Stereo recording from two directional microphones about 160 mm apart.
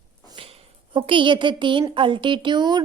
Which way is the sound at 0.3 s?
35° right (ahead or behind).